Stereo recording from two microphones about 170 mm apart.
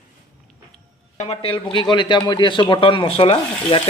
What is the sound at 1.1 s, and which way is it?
Speech, 35° left (ahead or behind).